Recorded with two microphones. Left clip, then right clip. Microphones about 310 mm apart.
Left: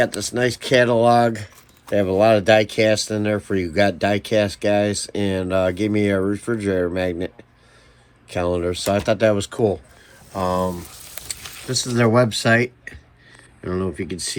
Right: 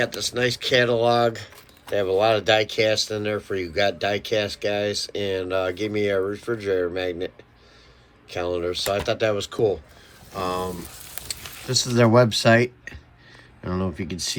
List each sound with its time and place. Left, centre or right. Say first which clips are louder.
0.0 s speech: left 3 dB; centre
8.3 s speech: left 4 dB; centre
11.3 s a sound: left 1 dB; centre
11.7 s speech: even; centre